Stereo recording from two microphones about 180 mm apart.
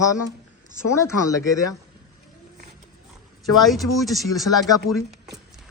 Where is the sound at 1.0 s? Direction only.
20° left (ahead or behind).